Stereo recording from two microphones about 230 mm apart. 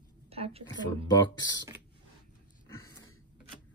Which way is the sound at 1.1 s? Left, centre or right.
Centre.